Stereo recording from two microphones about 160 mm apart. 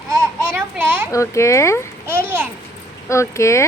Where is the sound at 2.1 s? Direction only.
15° right (ahead or behind).